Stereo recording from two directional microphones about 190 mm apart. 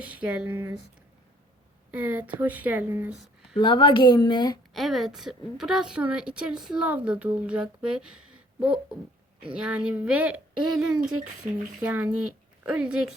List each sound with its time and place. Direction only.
0.0 s speech: 5° right (ahead or behind)
1.9 s speech: 10° right (ahead or behind)
3.2 s a sound: centre (ahead or behind)
3.6 s speech: 25° left (ahead or behind)
4.7 s a woman's voice: centre (ahead or behind)
9.5 s a woman's voice: 5° right (ahead or behind)